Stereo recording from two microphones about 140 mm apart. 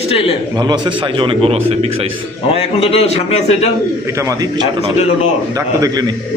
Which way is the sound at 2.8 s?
45° left (ahead or behind).